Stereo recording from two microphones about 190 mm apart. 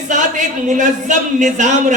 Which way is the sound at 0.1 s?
40° right (ahead or behind).